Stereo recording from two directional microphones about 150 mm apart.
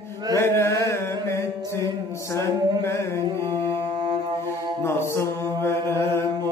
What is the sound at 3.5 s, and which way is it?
Music, 30° right (ahead or behind).